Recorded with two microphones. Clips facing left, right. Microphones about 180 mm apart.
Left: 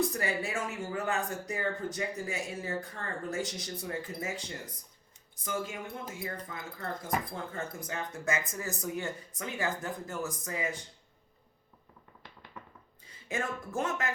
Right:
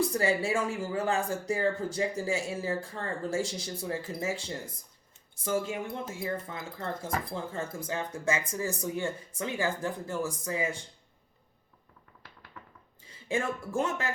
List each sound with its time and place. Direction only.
0.1 s speech: 30° right (ahead or behind)
13.1 s speech: 30° right (ahead or behind)